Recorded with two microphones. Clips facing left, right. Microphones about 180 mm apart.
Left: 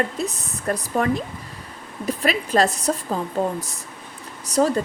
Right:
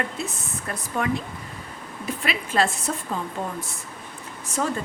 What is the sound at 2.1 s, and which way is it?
A woman's voice, 40° left (ahead or behind).